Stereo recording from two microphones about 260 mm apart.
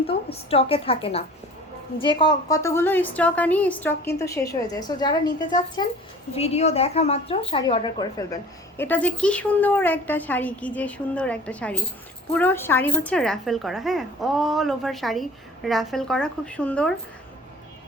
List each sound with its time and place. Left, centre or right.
0.1 s a woman's voice: left; by 16.9 s centre